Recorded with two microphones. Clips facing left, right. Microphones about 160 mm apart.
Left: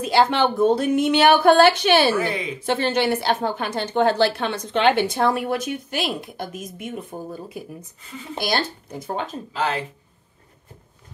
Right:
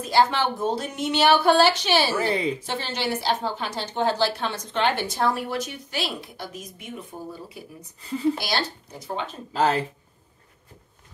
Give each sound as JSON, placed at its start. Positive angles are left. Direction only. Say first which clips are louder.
{"t": 0.0, "sound": "a woman's voice", "louder": "left 3 dB", "side_deg": 70}
{"t": 2.1, "sound": "speech", "louder": "even", "side_deg": -35}
{"t": 2.6, "sound": "a woman's voice", "louder": "left 8 dB", "side_deg": 55}
{"t": 8.4, "sound": "speech", "louder": "left 4 dB", "side_deg": 50}
{"t": 9.5, "sound": "speech", "louder": "right 4 dB", "side_deg": -40}